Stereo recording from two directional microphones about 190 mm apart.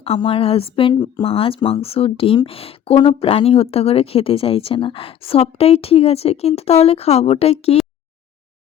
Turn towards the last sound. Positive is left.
turn(degrees=30)  # may be behind; listen again after turning